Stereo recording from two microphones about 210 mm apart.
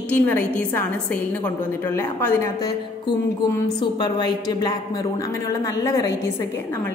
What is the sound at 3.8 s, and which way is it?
A woman's voice, 20° left (ahead or behind).